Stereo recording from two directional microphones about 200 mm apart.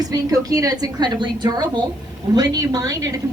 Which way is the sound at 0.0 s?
20° right (ahead or behind).